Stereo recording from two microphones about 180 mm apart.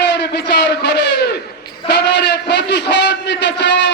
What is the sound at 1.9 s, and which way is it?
A man's voice, 70° left (ahead or behind).